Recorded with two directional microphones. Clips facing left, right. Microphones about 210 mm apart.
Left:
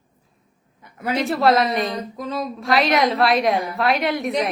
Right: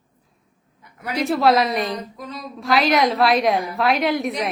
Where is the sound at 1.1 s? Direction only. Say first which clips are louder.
Even; centre (ahead or behind).